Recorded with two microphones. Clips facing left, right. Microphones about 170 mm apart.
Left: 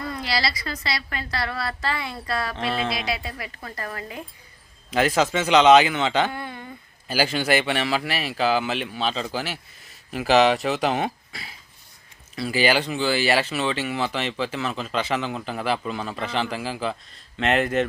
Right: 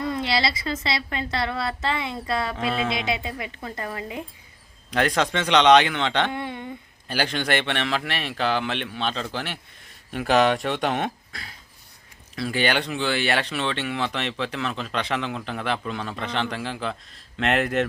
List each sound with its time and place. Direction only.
0.0 s a woman's voice: 25° right (ahead or behind)
4.9 s speech: 5° left (ahead or behind)
6.3 s a woman's voice: 20° right (ahead or behind)
7.1 s speech: 5° left (ahead or behind)